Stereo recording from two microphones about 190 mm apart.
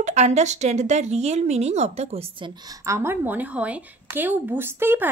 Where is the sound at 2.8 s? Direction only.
15° right (ahead or behind).